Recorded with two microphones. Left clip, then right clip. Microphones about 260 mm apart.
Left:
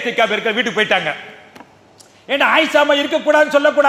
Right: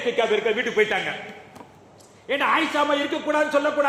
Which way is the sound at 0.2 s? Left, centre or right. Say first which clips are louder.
Left 7 dB; left.